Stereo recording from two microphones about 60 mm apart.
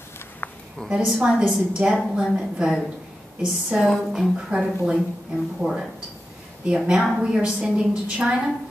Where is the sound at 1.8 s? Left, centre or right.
Right.